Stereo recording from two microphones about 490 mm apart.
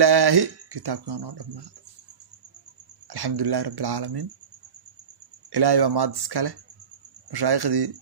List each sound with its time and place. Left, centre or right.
0.0 s speech: right
3.1 s speech: right
5.5 s speech: right